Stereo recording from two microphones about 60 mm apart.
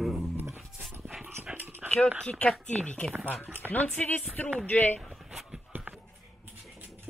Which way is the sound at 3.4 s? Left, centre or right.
Right.